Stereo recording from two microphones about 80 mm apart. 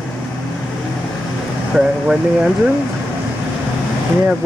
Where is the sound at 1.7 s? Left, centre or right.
Centre.